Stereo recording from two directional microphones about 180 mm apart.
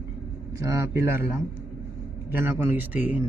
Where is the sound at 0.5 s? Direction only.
15° right (ahead or behind).